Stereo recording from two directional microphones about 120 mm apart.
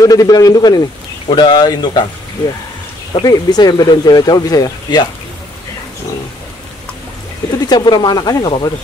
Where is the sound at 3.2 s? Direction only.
35° left (ahead or behind).